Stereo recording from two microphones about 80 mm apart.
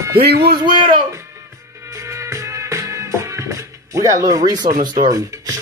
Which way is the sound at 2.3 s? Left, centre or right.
Right.